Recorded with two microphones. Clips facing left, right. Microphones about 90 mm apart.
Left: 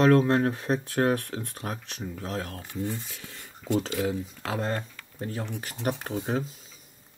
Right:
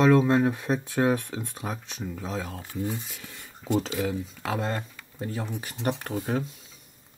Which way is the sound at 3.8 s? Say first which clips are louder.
Even; centre (ahead or behind).